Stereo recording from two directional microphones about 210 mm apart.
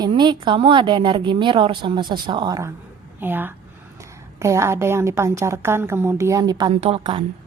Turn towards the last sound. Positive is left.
turn(degrees=-25)  # may be behind; listen again after turning